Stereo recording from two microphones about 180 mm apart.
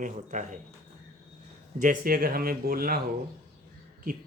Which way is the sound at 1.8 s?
50° right (ahead or behind).